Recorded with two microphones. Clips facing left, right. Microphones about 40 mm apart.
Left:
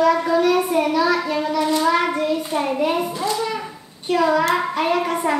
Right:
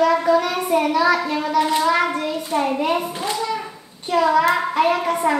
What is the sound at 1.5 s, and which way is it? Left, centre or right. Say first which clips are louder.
Child singing: right 3 dB; right.